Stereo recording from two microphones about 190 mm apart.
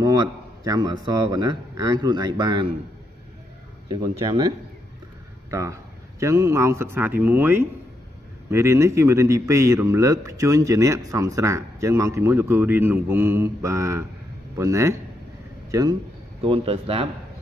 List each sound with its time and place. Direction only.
0.0 s a man's voice: 20° right (ahead or behind)
5.5 s a man's voice: 15° right (ahead or behind)
16.4 s speech: 30° right (ahead or behind)